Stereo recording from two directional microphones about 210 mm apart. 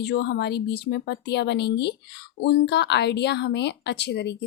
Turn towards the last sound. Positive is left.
turn(degrees=55)  # may be behind; listen again after turning